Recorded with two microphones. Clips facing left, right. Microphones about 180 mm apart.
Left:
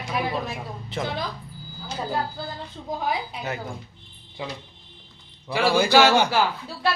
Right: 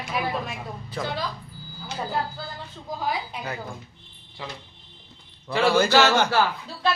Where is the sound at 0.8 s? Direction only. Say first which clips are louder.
Left 2 dB; 25° left (ahead or behind).